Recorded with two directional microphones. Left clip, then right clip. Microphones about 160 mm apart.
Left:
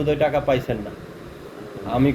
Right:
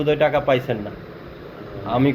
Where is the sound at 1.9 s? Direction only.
10° left (ahead or behind).